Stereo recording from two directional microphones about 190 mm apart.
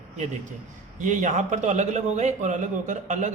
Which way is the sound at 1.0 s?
40° right (ahead or behind).